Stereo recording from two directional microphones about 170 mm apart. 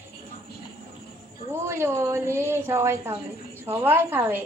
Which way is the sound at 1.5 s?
15° right (ahead or behind).